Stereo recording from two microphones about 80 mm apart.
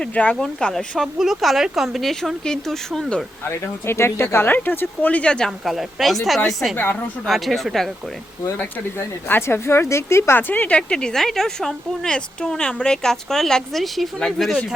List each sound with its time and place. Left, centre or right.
0.0 s speech: centre
0.3 s speech: centre
3.5 s speech: left; by 5.5 s centre
5.6 s speech: centre
8.4 s speech: left; by 14.6 s centre